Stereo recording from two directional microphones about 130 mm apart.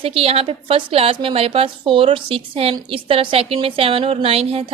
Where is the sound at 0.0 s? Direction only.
45° right (ahead or behind).